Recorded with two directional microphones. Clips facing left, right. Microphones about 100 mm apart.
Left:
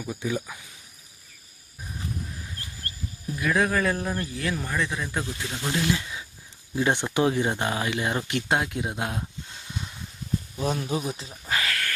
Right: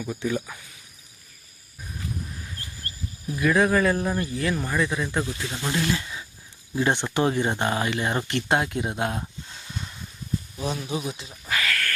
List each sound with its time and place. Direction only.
0.0 s speech: 5° left (ahead or behind)
3.3 s speech: centre (ahead or behind)
10.6 s speech: 40° left (ahead or behind)
11.1 s cricket: 35° left (ahead or behind)